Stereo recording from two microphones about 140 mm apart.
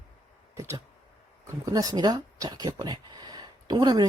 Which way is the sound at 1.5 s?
25° right (ahead or behind).